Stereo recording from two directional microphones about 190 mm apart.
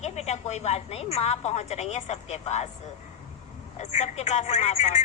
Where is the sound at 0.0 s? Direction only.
35° left (ahead or behind).